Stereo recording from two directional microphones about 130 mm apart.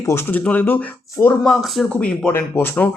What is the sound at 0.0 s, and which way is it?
Speech, 20° left (ahead or behind).